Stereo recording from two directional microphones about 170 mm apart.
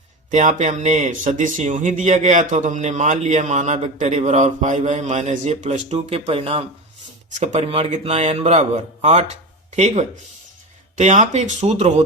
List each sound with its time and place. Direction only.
0.3 s speech: 45° right (ahead or behind)